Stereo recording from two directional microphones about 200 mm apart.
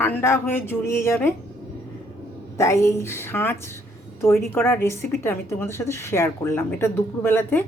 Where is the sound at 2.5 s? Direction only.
15° left (ahead or behind).